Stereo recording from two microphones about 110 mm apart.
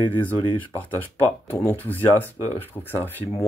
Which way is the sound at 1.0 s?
20° left (ahead or behind).